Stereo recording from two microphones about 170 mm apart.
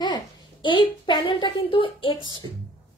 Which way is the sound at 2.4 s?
30° right (ahead or behind).